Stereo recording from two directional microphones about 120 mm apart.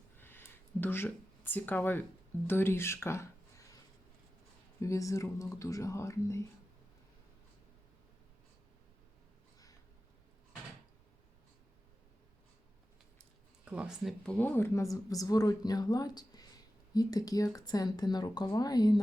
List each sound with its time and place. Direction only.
0.2 s a sound: 20° left (ahead or behind)
2.5 s speech: 20° left (ahead or behind)
4.8 s speech: 25° left (ahead or behind)
13.7 s speech: 10° right (ahead or behind)
14.3 s speech: 15° left (ahead or behind); by 18.9 s 35° left (ahead or behind)